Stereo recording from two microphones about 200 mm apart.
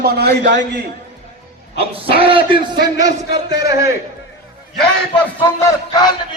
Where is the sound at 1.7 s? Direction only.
25° right (ahead or behind).